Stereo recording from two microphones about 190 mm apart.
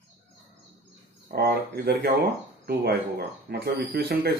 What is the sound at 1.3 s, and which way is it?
Speech, 60° right (ahead or behind).